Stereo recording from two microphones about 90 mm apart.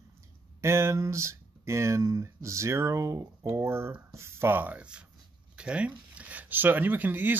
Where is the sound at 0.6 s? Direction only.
30° right (ahead or behind).